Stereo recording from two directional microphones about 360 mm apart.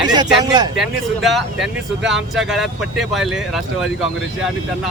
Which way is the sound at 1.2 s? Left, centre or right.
Centre.